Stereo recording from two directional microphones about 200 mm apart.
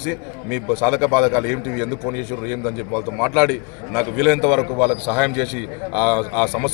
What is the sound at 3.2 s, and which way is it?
A man's voice, 5° left (ahead or behind).